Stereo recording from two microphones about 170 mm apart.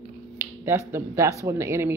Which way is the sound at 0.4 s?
15° right (ahead or behind).